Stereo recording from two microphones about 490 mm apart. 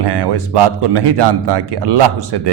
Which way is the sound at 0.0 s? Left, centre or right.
Right.